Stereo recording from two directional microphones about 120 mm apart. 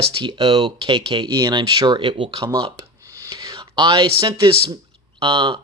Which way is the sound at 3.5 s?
35° right (ahead or behind).